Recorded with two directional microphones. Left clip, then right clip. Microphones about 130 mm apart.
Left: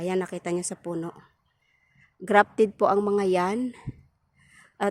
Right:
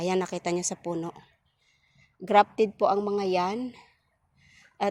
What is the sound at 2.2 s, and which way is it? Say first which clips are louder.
Speech: left 1 dB; 50° left (ahead or behind).